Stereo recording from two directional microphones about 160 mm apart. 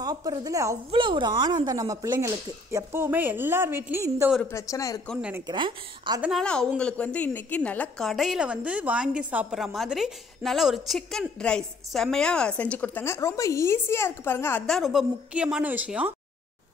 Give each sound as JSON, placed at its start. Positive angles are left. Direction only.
{"t": 0.0, "sound": "a woman's voice", "side_deg": -25}
{"t": 0.9, "sound": "speech", "side_deg": -30}
{"t": 4.4, "sound": "speech", "side_deg": 15}
{"t": 5.0, "sound": "a woman's voice", "side_deg": 0}
{"t": 5.5, "sound": "speech", "side_deg": -30}
{"t": 6.4, "sound": "a woman's voice", "side_deg": 5}
{"t": 14.7, "sound": "a woman's voice", "side_deg": 0}